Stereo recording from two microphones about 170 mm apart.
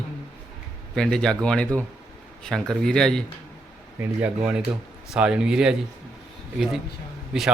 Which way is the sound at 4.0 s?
10° right (ahead or behind).